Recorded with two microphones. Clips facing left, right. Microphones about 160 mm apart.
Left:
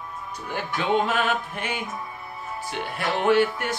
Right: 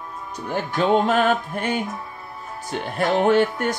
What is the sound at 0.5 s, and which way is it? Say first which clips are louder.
Music: right 5 dB; 45° right (ahead or behind).